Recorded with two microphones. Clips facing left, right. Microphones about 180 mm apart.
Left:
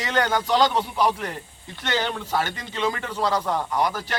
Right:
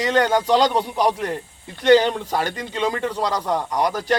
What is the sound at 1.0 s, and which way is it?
Speech, 40° right (ahead or behind).